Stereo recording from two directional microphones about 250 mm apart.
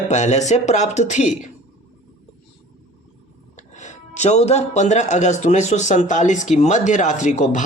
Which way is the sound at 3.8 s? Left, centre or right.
Left.